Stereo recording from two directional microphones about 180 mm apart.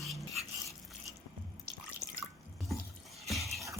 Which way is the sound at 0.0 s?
Centre (ahead or behind).